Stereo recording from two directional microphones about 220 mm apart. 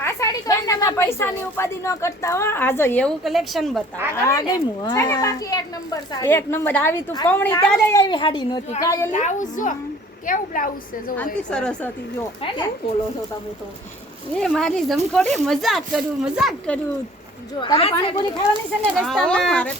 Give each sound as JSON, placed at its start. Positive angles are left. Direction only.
{"t": 0.0, "sound": "speech", "side_deg": 15}
{"t": 4.1, "sound": "a woman's voice", "side_deg": 15}
{"t": 9.1, "sound": "a woman's voice", "side_deg": 35}
{"t": 11.5, "sound": "speech", "side_deg": 5}
{"t": 12.4, "sound": "a woman's voice", "side_deg": 20}
{"t": 14.3, "sound": "speech", "side_deg": 5}
{"t": 17.6, "sound": "a woman's voice", "side_deg": 25}
{"t": 19.0, "sound": "speech", "side_deg": 0}